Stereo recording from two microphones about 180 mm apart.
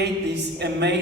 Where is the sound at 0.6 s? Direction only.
70° right (ahead or behind).